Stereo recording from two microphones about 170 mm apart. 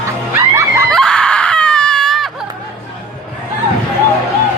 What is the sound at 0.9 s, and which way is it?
Screaming, 5° left (ahead or behind).